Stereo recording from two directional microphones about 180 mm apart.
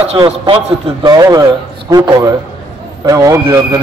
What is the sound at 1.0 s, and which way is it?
A man's voice, 20° right (ahead or behind).